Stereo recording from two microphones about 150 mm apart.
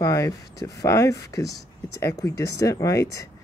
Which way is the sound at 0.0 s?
25° left (ahead or behind).